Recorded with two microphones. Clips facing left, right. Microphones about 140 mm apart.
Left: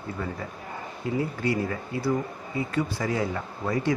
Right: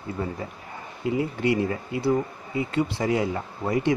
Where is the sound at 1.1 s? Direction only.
20° right (ahead or behind).